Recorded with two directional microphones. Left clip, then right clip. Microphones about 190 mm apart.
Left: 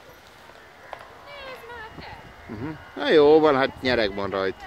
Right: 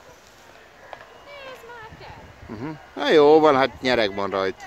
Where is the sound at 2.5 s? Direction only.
15° right (ahead or behind).